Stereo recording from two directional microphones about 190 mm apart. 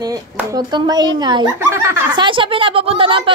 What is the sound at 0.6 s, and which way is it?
Speech, 25° right (ahead or behind).